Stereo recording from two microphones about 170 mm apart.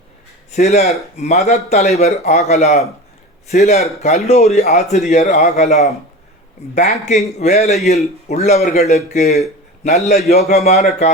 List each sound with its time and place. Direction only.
0.5 s a man's voice: 40° left (ahead or behind)